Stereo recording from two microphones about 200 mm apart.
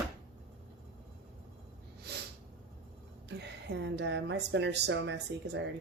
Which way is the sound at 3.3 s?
55° right (ahead or behind).